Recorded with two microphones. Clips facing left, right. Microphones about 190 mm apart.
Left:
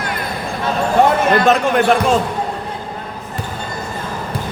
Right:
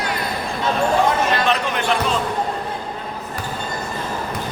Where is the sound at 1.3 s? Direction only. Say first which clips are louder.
Left 7 dB; 45° left (ahead or behind).